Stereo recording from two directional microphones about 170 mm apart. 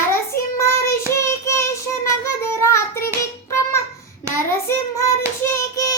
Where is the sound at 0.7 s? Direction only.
15° left (ahead or behind).